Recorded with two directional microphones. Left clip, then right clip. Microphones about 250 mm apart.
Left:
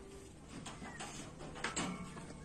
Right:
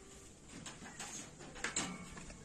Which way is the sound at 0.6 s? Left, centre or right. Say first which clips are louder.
Left 2 dB; right.